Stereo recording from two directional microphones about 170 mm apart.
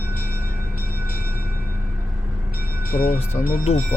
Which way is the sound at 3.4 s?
30° left (ahead or behind).